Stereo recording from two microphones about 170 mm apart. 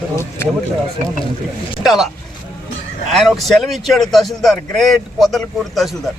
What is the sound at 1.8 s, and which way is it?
Speech, centre (ahead or behind).